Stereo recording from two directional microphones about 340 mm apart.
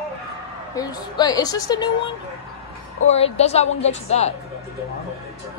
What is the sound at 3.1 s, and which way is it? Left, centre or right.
Female singing, centre.